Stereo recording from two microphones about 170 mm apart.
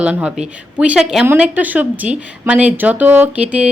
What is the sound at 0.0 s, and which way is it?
Speech, 5° right (ahead or behind).